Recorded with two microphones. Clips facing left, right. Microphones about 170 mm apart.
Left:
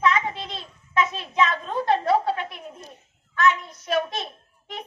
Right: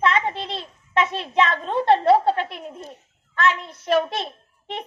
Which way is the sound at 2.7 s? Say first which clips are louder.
Right 5 dB; 55° right (ahead or behind).